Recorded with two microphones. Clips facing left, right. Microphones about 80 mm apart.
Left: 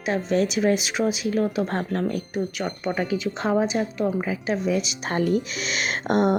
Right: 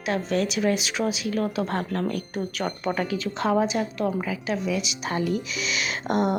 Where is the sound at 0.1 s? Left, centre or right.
Left.